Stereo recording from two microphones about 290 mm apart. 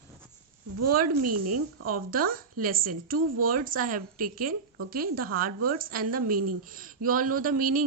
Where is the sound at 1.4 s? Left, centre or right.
Right.